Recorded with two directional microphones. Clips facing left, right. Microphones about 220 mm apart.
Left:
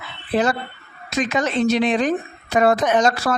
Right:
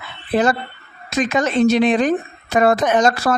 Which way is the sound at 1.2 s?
50° right (ahead or behind).